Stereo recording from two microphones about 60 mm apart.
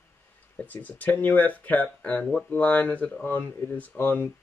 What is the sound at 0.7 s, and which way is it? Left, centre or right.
Speech, left.